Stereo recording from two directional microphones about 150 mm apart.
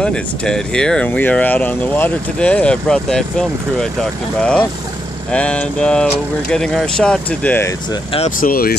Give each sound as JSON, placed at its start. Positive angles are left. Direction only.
{"t": 0.0, "sound": "speech", "side_deg": 5}
{"t": 7.9, "sound": "speech", "side_deg": 35}
{"t": 8.4, "sound": "speech", "side_deg": 75}